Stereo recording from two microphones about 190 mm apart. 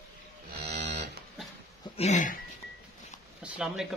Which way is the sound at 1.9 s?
40° left (ahead or behind).